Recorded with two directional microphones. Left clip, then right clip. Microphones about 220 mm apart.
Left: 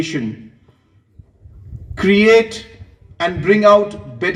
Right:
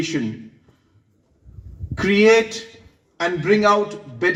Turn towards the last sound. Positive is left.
turn(degrees=50)  # may be behind; listen again after turning